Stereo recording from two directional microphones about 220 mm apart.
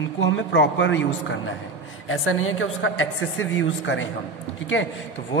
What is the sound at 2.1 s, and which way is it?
A woman's voice, 70° left (ahead or behind).